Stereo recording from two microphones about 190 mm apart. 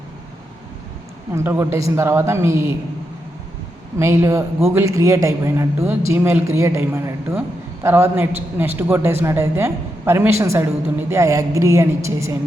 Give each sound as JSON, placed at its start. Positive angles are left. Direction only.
{"t": 1.3, "sound": "speech", "side_deg": -15}
{"t": 3.9, "sound": "a woman's voice", "side_deg": -15}